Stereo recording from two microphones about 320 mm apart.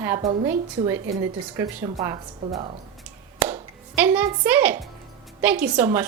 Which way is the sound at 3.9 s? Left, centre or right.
Centre.